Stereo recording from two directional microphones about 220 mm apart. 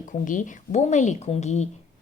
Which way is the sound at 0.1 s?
35° left (ahead or behind).